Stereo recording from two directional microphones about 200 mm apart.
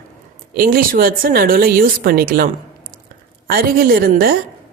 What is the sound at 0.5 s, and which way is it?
A woman's voice, 45° right (ahead or behind).